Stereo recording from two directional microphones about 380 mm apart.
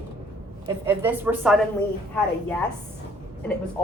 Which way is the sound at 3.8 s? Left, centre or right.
Centre.